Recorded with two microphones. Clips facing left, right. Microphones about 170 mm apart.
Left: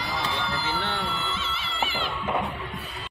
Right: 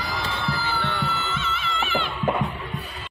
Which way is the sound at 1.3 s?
30° left (ahead or behind).